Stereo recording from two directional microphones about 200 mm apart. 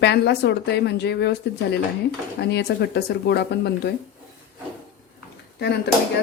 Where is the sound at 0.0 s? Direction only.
55° left (ahead or behind).